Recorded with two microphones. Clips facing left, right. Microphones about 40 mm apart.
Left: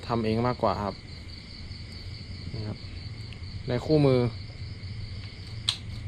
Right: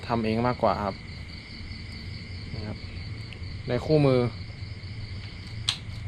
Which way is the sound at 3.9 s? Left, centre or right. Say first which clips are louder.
Even; right.